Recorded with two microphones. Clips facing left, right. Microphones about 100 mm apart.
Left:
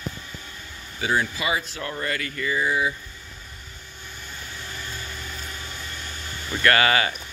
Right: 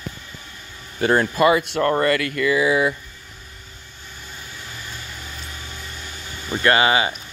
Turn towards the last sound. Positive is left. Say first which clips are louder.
# right 3 dB
turn(degrees=-20)  # may be behind; listen again after turning